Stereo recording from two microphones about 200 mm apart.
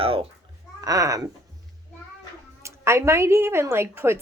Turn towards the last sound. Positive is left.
turn(degrees=-10)  # may be behind; listen again after turning